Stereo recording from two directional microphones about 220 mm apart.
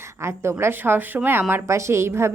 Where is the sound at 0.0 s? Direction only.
10° right (ahead or behind).